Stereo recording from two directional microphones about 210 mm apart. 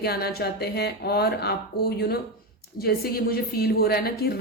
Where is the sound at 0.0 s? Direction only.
50° left (ahead or behind).